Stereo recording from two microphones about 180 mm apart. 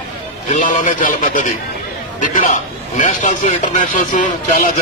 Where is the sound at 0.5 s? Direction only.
45° left (ahead or behind).